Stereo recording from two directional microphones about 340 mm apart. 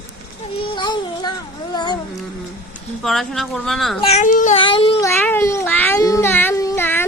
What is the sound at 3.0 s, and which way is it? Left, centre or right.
Speech, centre.